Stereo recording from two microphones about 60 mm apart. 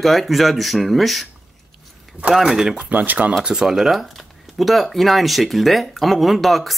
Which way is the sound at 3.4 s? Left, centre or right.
Centre.